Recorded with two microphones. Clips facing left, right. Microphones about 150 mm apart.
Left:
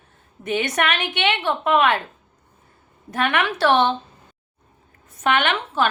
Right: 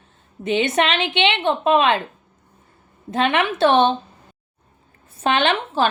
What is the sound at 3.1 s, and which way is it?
Speech, 20° right (ahead or behind).